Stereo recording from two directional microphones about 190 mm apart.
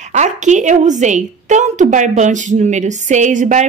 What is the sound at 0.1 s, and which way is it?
A woman's voice, 40° right (ahead or behind).